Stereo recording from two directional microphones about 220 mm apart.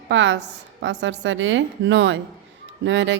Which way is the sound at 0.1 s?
55° right (ahead or behind).